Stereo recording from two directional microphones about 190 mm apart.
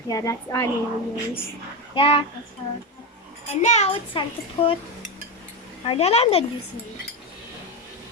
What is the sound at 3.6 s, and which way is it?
A child's voice, 35° left (ahead or behind).